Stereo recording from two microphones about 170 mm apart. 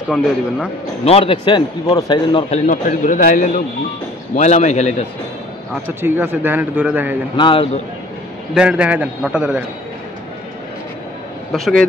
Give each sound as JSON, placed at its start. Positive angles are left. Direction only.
{"t": 1.0, "sound": "a man's voice", "side_deg": 35}
{"t": 2.5, "sound": "a man's voice", "side_deg": 45}
{"t": 5.9, "sound": "a man's voice", "side_deg": -15}
{"t": 7.3, "sound": "a man's voice", "side_deg": 30}
{"t": 8.5, "sound": "a man's voice", "side_deg": -5}
{"t": 11.5, "sound": "a man's voice", "side_deg": 0}